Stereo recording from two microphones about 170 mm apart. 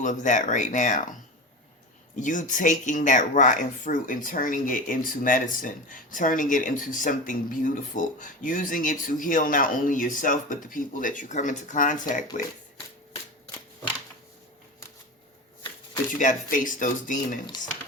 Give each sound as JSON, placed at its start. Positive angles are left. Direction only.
{"t": 0.0, "sound": "speech", "side_deg": 50}
{"t": 16.1, "sound": "speech", "side_deg": 50}